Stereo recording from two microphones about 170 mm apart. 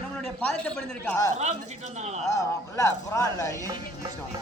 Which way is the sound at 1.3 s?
40° right (ahead or behind).